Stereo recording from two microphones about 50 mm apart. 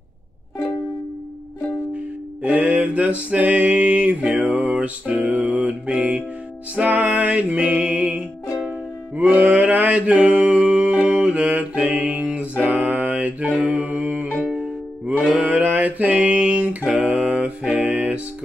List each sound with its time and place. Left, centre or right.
2.5 s mantra: right
4.4 s music: right
4.7 s music: right
9.1 s mantra: right
11.1 s music: right
12.7 s a sound: right
13.6 s mantra: right
14.4 s music: centre
15.3 s music: right
16.8 s music: centre
17.1 s music: right